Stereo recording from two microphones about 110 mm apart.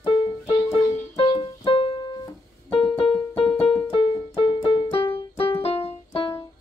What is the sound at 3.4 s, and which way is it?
Keyboard, 5° left (ahead or behind).